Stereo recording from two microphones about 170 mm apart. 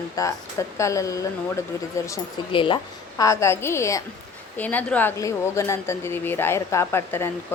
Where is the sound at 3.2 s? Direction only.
20° left (ahead or behind).